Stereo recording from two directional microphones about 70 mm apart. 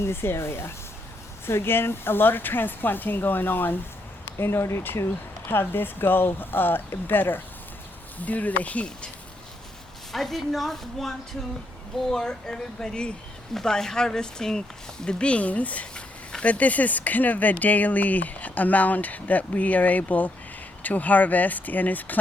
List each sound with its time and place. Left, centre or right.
0.0 s speech: left; by 9.0 s centre
10.1 s a woman's voice: centre; by 22.2 s left